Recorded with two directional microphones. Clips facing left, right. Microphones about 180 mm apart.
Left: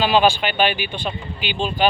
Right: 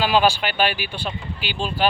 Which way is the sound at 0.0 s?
5° right (ahead or behind).